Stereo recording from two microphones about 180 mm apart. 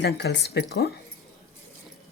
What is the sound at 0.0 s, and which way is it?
Speech, 70° left (ahead or behind).